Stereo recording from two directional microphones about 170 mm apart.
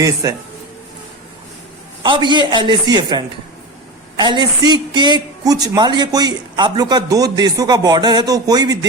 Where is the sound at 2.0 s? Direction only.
25° right (ahead or behind).